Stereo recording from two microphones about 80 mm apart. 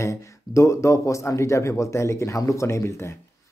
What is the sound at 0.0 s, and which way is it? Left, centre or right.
Speech, left.